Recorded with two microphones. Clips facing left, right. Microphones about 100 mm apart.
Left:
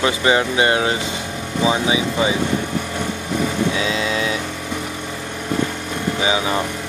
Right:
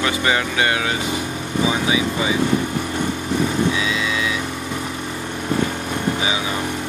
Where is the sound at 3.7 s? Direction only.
35° left (ahead or behind).